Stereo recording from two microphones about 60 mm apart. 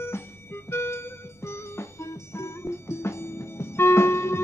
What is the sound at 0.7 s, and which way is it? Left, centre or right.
Music, left.